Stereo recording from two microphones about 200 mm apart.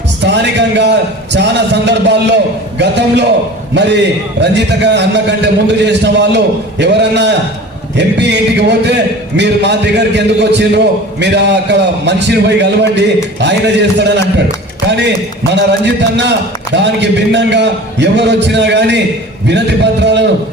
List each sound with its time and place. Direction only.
0.2 s music: 60° right (ahead or behind)
1.3 s a sound: 60° right (ahead or behind)
3.8 s a man's voice: 60° right (ahead or behind)